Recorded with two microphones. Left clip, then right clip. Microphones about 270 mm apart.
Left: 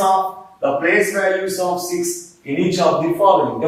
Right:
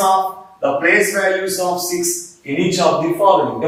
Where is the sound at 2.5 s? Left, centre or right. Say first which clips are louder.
Right 1 dB; centre.